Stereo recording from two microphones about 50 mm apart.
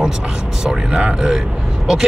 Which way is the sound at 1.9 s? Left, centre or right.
Centre.